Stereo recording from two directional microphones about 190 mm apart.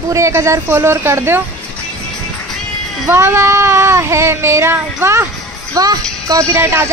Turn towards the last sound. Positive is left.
turn(degrees=-15)  # may be behind; listen again after turning